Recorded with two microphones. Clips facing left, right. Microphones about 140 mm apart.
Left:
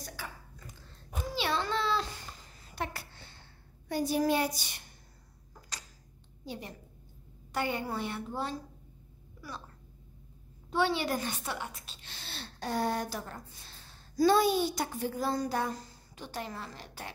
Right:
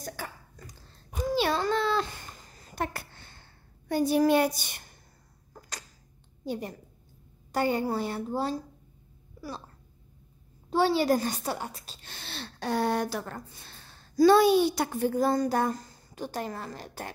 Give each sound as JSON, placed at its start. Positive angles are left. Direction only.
{"t": 0.0, "sound": "cough", "side_deg": -45}
{"t": 1.3, "sound": "a sound", "side_deg": -45}
{"t": 3.9, "sound": "a child's voice", "side_deg": -60}
{"t": 5.5, "sound": "a sound", "side_deg": -50}
{"t": 6.4, "sound": "a woman's voice", "side_deg": -45}
{"t": 10.7, "sound": "a woman's voice", "side_deg": -35}
{"t": 12.2, "sound": "speech", "side_deg": -80}